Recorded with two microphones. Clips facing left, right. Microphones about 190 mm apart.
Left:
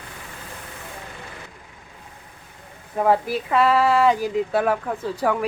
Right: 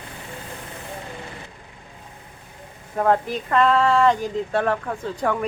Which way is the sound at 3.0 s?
5° left (ahead or behind).